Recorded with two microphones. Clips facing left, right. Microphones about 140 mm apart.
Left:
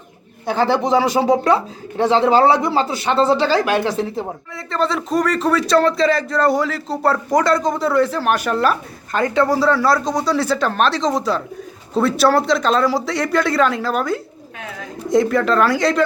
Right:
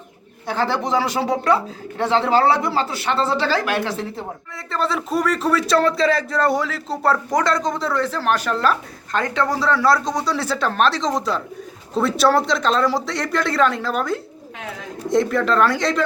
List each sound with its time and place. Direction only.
0.4 s speech: 15° left (ahead or behind)
4.5 s speech: centre (ahead or behind)